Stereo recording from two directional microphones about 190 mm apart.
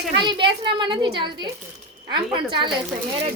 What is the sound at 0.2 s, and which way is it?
A woman's voice, 25° right (ahead or behind).